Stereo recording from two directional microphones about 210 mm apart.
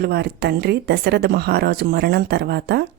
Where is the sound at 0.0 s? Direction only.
50° right (ahead or behind).